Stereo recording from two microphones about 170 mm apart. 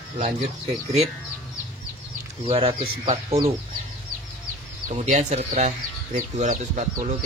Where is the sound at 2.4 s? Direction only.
35° right (ahead or behind).